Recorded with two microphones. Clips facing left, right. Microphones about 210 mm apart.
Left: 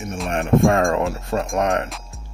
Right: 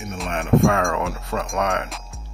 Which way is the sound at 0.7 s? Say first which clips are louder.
Left 4 dB; 30° left (ahead or behind).